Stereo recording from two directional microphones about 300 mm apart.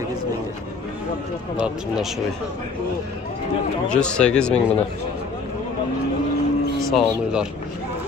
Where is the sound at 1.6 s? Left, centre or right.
Centre.